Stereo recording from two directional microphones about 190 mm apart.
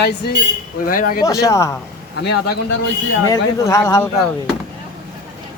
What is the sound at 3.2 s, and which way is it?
Speech, 20° left (ahead or behind).